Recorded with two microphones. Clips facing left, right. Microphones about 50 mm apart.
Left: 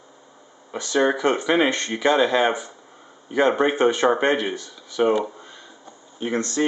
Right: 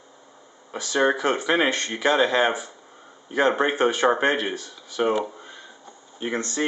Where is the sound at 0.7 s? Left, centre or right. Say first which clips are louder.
Left 1 dB; centre.